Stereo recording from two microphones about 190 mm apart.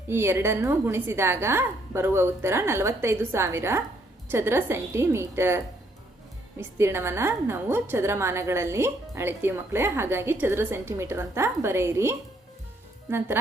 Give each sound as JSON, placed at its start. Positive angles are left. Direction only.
{"t": 0.1, "sound": "a woman's voice", "side_deg": -15}